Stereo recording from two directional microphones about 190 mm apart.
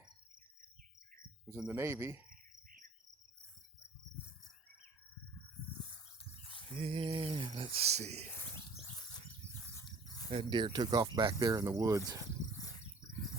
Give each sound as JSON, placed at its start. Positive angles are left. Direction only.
{"t": 1.5, "sound": "speech", "side_deg": -10}
{"t": 6.7, "sound": "speech", "side_deg": -30}
{"t": 10.2, "sound": "speech", "side_deg": -25}